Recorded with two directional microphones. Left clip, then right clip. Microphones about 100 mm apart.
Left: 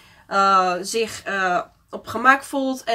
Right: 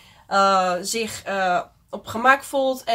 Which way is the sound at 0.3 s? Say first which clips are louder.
Left 1 dB; 15° right (ahead or behind).